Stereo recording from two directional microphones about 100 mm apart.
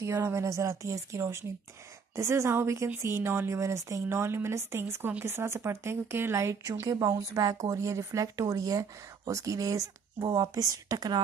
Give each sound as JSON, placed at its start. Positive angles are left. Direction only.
{"t": 0.0, "sound": "a woman's voice", "side_deg": -25}